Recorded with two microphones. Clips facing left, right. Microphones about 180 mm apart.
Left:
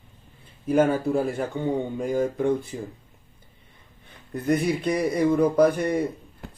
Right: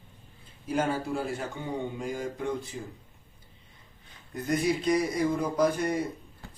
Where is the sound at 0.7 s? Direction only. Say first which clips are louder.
Left 8 dB; 55° left (ahead or behind).